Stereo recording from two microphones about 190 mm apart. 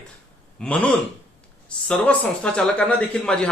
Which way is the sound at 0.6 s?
5° left (ahead or behind).